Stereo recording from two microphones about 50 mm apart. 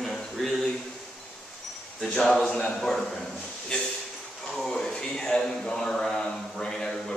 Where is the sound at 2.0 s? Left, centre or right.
Centre.